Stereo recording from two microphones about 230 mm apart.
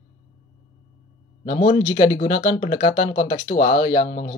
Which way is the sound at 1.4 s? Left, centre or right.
Left.